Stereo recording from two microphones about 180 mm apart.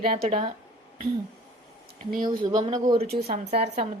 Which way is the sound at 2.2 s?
25° right (ahead or behind).